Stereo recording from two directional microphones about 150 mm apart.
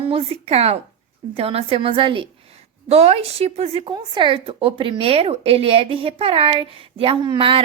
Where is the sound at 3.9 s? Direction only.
30° right (ahead or behind).